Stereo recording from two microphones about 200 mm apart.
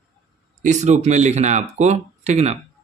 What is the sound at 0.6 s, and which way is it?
Speech, 35° right (ahead or behind).